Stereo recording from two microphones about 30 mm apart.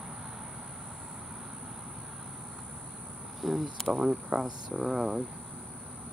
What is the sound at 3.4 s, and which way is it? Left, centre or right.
Speech, centre.